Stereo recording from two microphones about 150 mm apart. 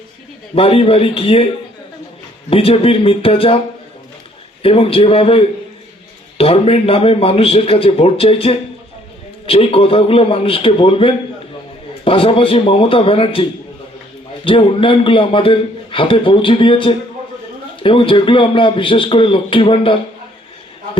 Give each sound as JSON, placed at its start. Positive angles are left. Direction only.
{"t": 0.5, "sound": "a man's voice", "side_deg": 40}
{"t": 2.5, "sound": "a man's voice", "side_deg": 40}
{"t": 4.6, "sound": "a man's voice", "side_deg": 40}